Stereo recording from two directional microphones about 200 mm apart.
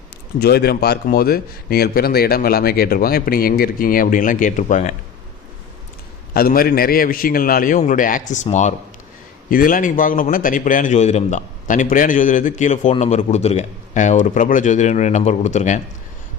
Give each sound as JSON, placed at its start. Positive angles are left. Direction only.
{"t": 0.3, "sound": "a man's voice", "side_deg": 50}
{"t": 6.3, "sound": "a man's voice", "side_deg": 45}